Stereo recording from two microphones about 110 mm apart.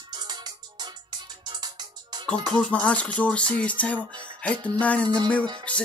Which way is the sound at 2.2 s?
10° left (ahead or behind).